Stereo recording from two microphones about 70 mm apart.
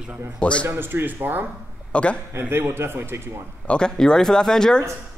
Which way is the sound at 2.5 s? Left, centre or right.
Right.